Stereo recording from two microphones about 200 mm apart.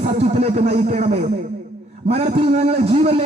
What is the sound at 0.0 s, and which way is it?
A man's voice, 30° right (ahead or behind).